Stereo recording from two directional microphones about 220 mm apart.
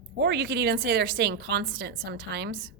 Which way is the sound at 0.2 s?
50° right (ahead or behind).